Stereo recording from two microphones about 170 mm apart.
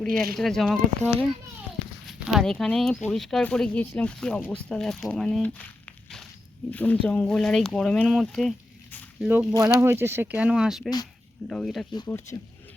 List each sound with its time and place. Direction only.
0.1 s speech: 60° right (ahead or behind)
0.3 s speech: centre (ahead or behind)
6.7 s speech: 10° left (ahead or behind)
9.2 s speech: 5° right (ahead or behind)
9.5 s speech: 20° right (ahead or behind); by 10.8 s 5° right (ahead or behind)
10.8 s speech: 25° left (ahead or behind)
11.4 s speech: 5° left (ahead or behind)
12.0 s speech: 15° left (ahead or behind)